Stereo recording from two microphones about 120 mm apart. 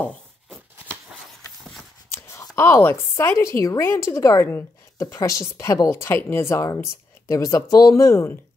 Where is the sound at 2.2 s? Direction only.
25° left (ahead or behind).